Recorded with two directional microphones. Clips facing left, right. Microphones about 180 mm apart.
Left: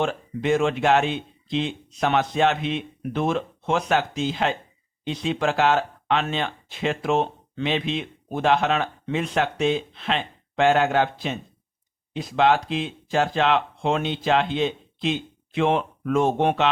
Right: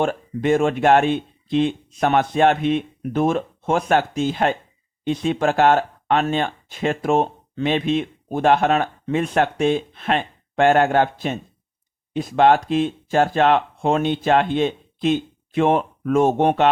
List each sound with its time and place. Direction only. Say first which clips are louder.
0.0 s speech: right 4 dB; 50° right (ahead or behind)